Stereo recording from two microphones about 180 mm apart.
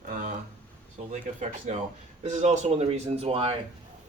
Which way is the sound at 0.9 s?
40° right (ahead or behind).